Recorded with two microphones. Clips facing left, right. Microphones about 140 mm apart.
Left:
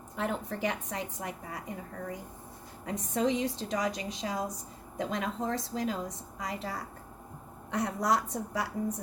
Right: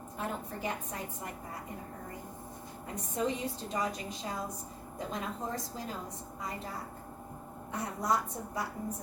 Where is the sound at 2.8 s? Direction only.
85° left.